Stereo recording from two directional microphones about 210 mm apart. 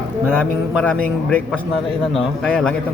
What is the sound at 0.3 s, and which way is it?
Speech, 5° right (ahead or behind).